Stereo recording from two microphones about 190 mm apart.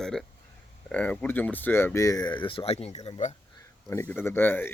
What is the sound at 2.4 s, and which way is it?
Speech, 30° left (ahead or behind).